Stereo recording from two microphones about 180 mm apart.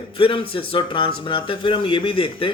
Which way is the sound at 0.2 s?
30° left (ahead or behind).